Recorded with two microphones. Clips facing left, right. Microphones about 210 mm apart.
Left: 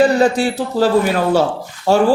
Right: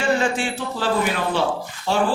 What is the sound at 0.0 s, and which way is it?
A man's voice, 40° left (ahead or behind).